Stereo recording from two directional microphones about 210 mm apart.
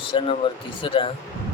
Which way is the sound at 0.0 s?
25° left (ahead or behind).